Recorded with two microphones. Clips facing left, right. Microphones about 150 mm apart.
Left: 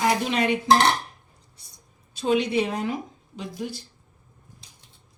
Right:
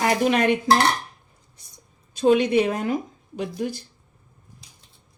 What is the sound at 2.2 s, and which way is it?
Speech, 50° right (ahead or behind).